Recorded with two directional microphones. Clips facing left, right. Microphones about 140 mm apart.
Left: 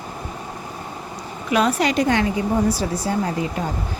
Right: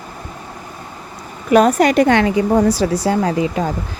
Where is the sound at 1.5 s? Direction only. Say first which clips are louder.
Right 7 dB; 45° right (ahead or behind).